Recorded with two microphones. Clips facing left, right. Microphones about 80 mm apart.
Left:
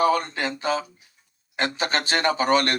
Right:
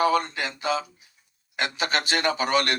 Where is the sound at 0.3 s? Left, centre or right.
Left.